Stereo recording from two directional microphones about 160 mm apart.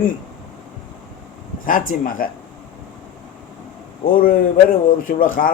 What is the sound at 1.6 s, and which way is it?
Speech, 60° left (ahead or behind).